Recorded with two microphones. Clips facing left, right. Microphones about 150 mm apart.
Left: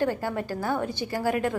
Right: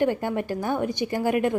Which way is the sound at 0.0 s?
20° right (ahead or behind).